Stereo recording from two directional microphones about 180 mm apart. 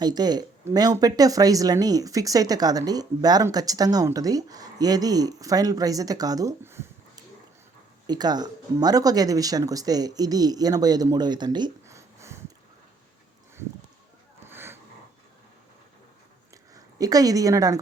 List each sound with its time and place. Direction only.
0.0 s speech: 20° right (ahead or behind)
8.0 s speech: 20° right (ahead or behind)
14.4 s a sound: 10° right (ahead or behind)
17.0 s speech: 20° right (ahead or behind)